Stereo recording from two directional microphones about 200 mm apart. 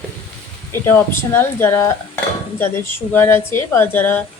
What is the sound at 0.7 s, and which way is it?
Speech, 10° left (ahead or behind).